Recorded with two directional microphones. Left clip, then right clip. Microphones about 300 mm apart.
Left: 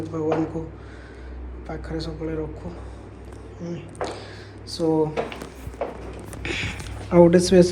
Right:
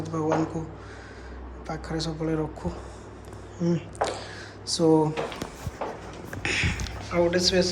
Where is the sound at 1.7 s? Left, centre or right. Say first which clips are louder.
Even; centre.